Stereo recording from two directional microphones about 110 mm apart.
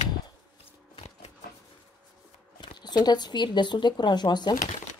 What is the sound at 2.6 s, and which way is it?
Speech, 45° left (ahead or behind).